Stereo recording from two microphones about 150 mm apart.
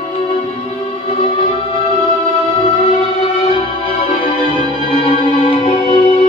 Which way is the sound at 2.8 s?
40° left (ahead or behind).